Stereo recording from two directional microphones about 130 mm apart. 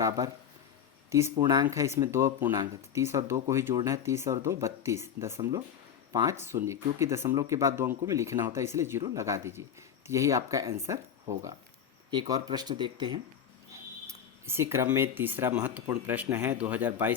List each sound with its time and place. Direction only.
1.1 s speech: 25° right (ahead or behind)
12.1 s speech: 30° right (ahead or behind)
14.1 s speech: 20° right (ahead or behind)